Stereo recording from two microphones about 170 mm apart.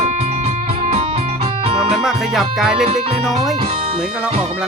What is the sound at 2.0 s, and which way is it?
Music, centre (ahead or behind).